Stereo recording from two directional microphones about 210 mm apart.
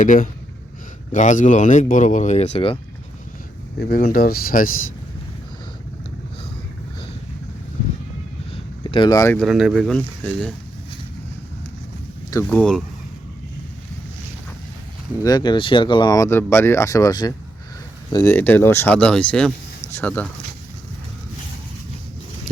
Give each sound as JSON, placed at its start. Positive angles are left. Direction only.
{"t": 0.0, "sound": "speech", "side_deg": 35}
{"t": 3.8, "sound": "speech", "side_deg": 45}
{"t": 8.8, "sound": "speech", "side_deg": 20}
{"t": 12.3, "sound": "speech", "side_deg": 10}
{"t": 15.2, "sound": "speech", "side_deg": 20}